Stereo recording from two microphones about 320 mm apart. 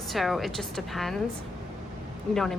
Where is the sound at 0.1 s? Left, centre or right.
Centre.